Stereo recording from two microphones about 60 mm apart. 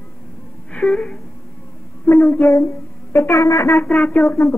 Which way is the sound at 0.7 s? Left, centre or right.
Centre.